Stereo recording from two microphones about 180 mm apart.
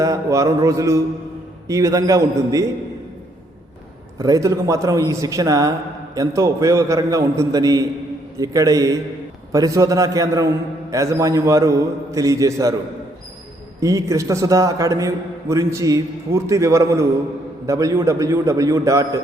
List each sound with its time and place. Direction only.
0.0 s a man's voice: 20° right (ahead or behind)
4.2 s a man's voice: 20° right (ahead or behind)
13.7 s a man's voice: 20° right (ahead or behind)